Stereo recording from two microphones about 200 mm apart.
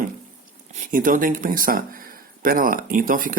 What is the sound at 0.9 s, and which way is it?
Speech, 45° right (ahead or behind).